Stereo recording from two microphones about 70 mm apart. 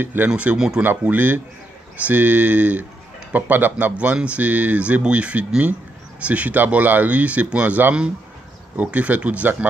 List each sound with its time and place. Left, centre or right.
0.0 s speech: right
0.6 s speech: centre
0.8 s speech: right